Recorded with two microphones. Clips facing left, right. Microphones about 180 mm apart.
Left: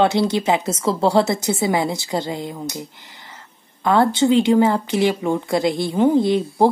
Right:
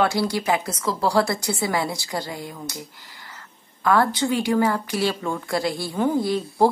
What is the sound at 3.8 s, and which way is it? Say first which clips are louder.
A woman's voice: left 4 dB; 25° left (ahead or behind).